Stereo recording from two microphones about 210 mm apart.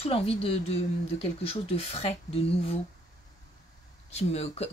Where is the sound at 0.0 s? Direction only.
25° left (ahead or behind).